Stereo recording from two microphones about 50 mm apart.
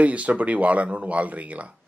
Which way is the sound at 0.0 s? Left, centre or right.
Right.